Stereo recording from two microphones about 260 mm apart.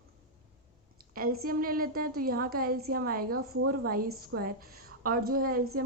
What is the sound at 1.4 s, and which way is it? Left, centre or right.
A woman's voice, right.